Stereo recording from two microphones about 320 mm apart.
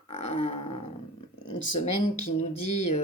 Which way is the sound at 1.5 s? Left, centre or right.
Left.